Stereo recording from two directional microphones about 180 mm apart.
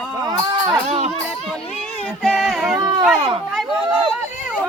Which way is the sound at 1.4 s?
5° left (ahead or behind).